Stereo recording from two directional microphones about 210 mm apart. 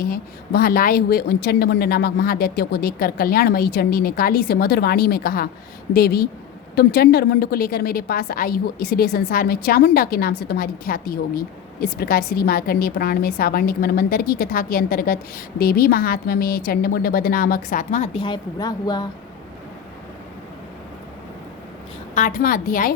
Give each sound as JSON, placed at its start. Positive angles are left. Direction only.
{"t": 0.0, "sound": "a woman's voice", "side_deg": 45}
{"t": 22.1, "sound": "a woman's voice", "side_deg": 40}